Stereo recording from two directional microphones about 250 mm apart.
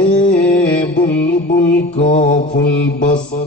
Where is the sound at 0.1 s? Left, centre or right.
Centre.